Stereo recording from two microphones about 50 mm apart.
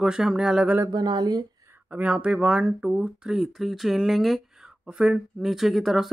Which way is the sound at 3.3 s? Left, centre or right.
Centre.